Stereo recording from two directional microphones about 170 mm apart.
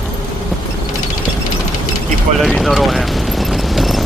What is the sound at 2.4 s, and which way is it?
Clip-clop, centre (ahead or behind).